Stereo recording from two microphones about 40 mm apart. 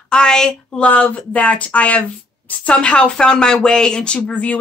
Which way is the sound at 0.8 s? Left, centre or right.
Left.